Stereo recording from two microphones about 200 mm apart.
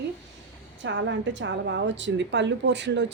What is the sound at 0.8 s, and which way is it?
Speech, 65° right (ahead or behind).